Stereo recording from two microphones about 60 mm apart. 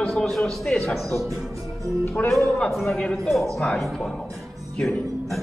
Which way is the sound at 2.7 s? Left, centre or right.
Centre.